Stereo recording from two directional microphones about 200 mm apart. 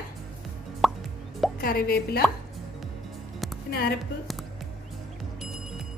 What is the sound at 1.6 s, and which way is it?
Speech, 50° left (ahead or behind).